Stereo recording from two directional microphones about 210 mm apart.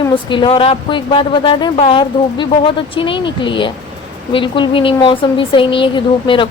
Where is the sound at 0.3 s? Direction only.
25° left (ahead or behind).